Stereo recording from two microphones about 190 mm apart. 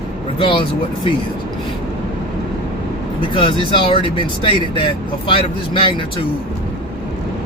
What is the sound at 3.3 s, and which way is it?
Speech, 25° left (ahead or behind).